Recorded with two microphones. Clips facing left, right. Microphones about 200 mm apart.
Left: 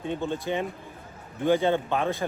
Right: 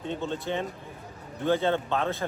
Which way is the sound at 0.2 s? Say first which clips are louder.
Left 2 dB; 15° left (ahead or behind).